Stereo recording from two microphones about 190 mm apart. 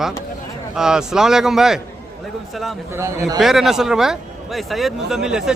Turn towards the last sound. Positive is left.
turn(degrees=-5)  # may be behind; listen again after turning